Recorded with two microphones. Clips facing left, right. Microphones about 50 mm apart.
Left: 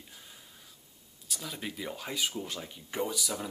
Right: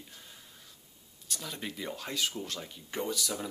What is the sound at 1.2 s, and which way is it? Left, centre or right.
Speech, centre.